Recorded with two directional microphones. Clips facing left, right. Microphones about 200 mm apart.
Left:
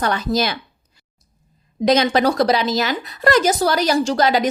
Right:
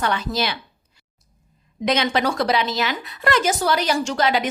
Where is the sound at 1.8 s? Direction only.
35° left (ahead or behind).